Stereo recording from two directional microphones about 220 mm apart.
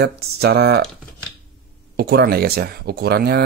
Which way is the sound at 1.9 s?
45° right (ahead or behind).